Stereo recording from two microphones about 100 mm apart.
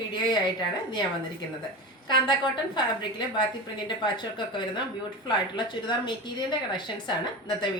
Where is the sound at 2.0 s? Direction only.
50° left (ahead or behind).